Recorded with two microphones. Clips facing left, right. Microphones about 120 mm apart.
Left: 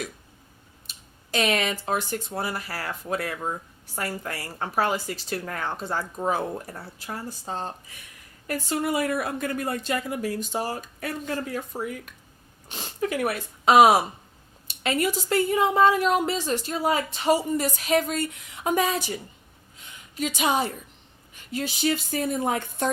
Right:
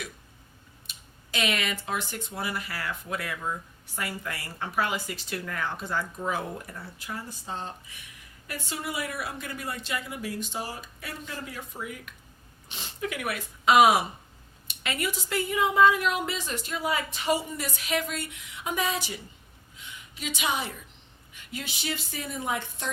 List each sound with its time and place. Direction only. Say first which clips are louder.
0.9 s a sound: left 1 dB; 35° left (ahead or behind)
1.3 s a woman's voice: left 5 dB; 40° left (ahead or behind)
20.1 s speech: left 6 dB; 45° left (ahead or behind)